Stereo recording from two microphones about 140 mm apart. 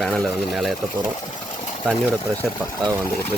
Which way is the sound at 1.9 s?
Centre (ahead or behind).